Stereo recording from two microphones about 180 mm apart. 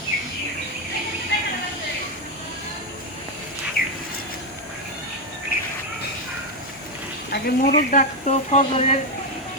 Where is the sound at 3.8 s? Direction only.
55° left (ahead or behind).